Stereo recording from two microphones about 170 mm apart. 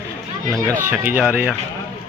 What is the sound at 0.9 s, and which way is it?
Speech, 10° right (ahead or behind).